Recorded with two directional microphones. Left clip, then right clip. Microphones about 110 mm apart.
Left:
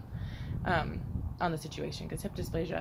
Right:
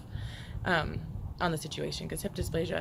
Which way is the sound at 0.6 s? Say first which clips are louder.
Right 2 dB; 30° right (ahead or behind).